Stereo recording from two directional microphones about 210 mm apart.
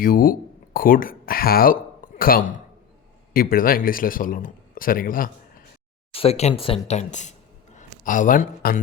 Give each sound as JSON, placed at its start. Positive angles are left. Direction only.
{"t": 0.0, "sound": "a man's voice", "side_deg": 45}
{"t": 6.1, "sound": "a man's voice", "side_deg": 30}